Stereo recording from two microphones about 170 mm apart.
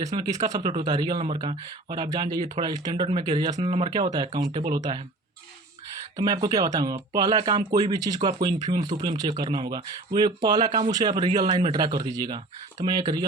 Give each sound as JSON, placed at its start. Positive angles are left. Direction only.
{"t": 0.2, "sound": "speech", "side_deg": -20}
{"t": 0.6, "sound": "speech", "side_deg": -30}
{"t": 3.6, "sound": "speech", "side_deg": -35}
{"t": 6.1, "sound": "speech", "side_deg": -25}